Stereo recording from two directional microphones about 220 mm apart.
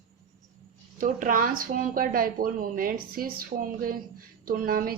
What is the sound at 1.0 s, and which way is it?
Speech, 35° right (ahead or behind).